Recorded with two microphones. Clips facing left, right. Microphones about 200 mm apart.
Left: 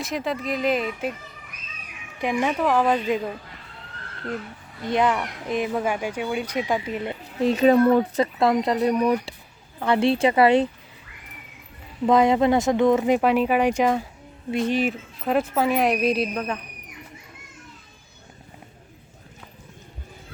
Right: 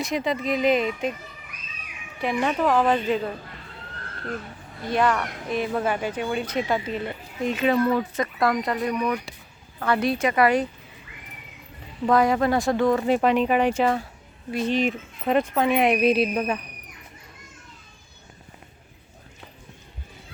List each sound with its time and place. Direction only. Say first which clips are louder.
0.0 s speech: right 2 dB; centre (ahead or behind)
2.2 s speech: even; 5° left (ahead or behind)
4.9 s speech: left 1 dB; 20° left (ahead or behind)
7.4 s speech: left 5 dB; 35° left (ahead or behind)
7.9 s speech: left 5 dB; 50° left (ahead or behind)
8.2 s speech: left 3 dB; 25° left (ahead or behind)
12.0 s speech: left 2 dB; 20° left (ahead or behind)
13.1 s speech: even; 10° left (ahead or behind)